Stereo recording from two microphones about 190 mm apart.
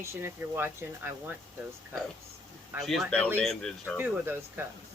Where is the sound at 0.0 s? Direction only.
15° right (ahead or behind).